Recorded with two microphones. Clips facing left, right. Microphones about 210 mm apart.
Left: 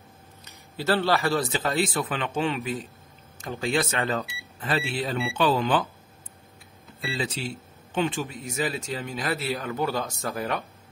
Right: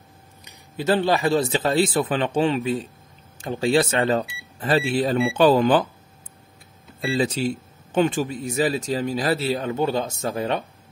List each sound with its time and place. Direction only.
0.5 s speech: 15° right (ahead or behind); by 5.9 s 40° right (ahead or behind)
7.0 s speech: 50° right (ahead or behind); by 10.6 s 30° right (ahead or behind)